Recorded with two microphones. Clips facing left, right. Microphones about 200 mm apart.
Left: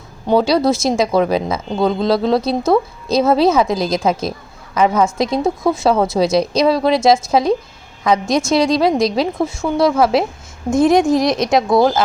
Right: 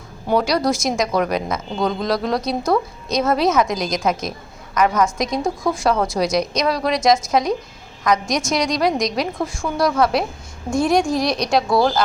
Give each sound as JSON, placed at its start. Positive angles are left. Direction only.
{"t": 0.3, "sound": "speech", "side_deg": 25}